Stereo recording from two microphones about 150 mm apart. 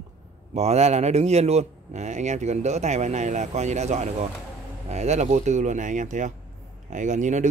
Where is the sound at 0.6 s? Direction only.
45° right (ahead or behind).